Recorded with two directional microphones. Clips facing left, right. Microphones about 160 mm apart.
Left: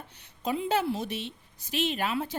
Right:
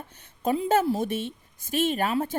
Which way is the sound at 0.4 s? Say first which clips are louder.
Right 5 dB; 45° right (ahead or behind).